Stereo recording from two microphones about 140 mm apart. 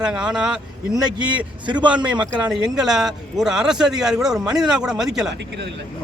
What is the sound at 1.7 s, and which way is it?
Speech, 35° right (ahead or behind).